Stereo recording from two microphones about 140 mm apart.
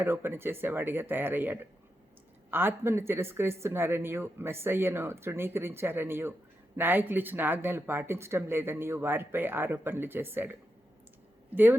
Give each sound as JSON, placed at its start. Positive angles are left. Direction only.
{"t": 0.0, "sound": "speech", "side_deg": -15}